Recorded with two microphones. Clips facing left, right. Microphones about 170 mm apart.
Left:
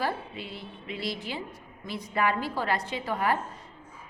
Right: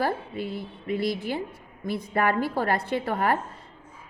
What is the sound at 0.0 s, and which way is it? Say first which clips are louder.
A woman's voice: right 4 dB; 50° right (ahead or behind).